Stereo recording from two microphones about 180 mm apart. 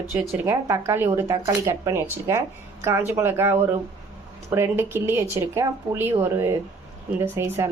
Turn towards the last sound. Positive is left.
turn(degrees=-15)  # may be behind; listen again after turning